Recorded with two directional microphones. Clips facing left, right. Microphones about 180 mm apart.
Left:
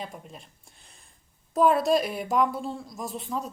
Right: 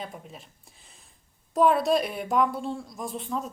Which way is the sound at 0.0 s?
Centre (ahead or behind).